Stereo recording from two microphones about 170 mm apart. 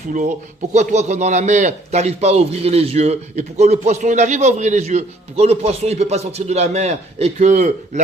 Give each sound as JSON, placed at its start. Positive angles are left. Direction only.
{"t": 0.7, "sound": "a man's voice", "side_deg": -40}